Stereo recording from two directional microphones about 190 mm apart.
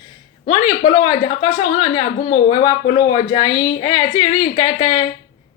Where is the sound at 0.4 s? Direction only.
25° left (ahead or behind).